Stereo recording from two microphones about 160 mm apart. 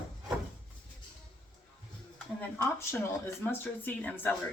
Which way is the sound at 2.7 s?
15° left (ahead or behind).